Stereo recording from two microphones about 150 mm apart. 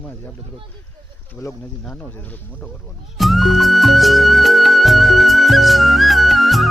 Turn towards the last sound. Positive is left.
turn(degrees=0)  # may be behind; listen again after turning